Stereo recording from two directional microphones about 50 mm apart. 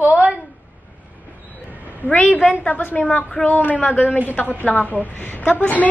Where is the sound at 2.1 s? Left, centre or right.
Left.